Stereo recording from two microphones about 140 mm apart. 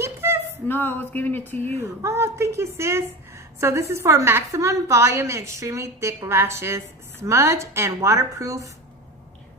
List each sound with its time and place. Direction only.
0.0 s a sound: 15° right (ahead or behind)
0.7 s speech: 15° left (ahead or behind)
1.8 s a woman's voice: 20° right (ahead or behind)